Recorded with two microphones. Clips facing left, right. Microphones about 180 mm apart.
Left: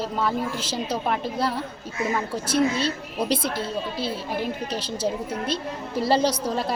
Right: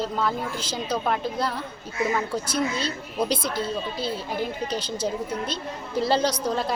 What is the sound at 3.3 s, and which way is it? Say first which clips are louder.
A woman's voice: left 1 dB; 5° left (ahead or behind).